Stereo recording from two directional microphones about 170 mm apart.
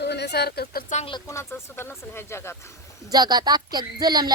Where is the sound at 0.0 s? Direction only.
80° left; by 0.9 s 60° left (ahead or behind).